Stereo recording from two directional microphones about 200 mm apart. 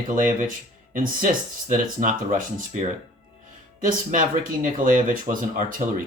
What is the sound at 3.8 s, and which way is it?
Speech, 40° right (ahead or behind).